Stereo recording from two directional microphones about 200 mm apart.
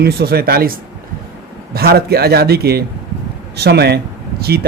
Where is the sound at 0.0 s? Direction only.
50° right (ahead or behind).